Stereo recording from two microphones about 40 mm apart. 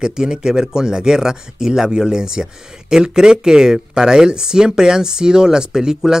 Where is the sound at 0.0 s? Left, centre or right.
Centre.